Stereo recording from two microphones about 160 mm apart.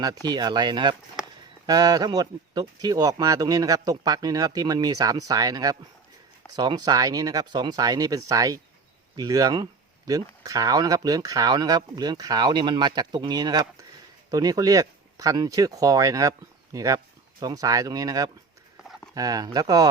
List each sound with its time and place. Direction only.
0.0 s speech: 25° right (ahead or behind)